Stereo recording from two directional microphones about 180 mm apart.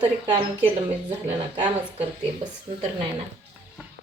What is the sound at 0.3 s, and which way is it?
Speech, 30° right (ahead or behind).